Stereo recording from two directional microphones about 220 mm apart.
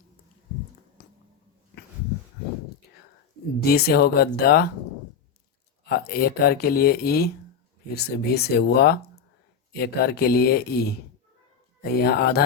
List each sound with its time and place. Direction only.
3.6 s speech: 45° left (ahead or behind)
5.9 s speech: 45° left (ahead or behind)